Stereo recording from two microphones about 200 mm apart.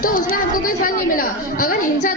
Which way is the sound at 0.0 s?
45° left (ahead or behind).